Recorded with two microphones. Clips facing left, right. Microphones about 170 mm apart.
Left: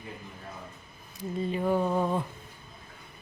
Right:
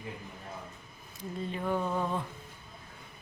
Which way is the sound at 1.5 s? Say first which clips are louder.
Left 5 dB; 10° left (ahead or behind).